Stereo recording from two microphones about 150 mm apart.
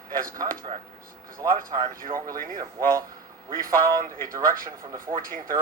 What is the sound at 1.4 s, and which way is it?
Speech, 25° right (ahead or behind).